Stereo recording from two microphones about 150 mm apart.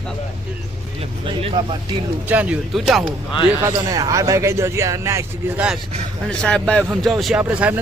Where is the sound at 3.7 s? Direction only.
25° right (ahead or behind).